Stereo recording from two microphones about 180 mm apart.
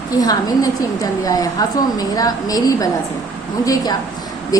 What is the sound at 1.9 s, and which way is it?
Speech, 20° left (ahead or behind).